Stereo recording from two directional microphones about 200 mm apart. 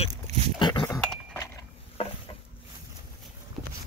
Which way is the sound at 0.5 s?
20° left (ahead or behind).